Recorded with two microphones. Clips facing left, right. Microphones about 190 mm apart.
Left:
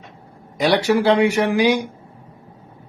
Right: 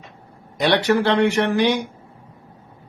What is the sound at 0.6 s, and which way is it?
A man's voice, 10° left (ahead or behind).